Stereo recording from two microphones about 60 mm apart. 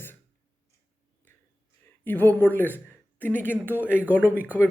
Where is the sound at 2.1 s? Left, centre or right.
Left.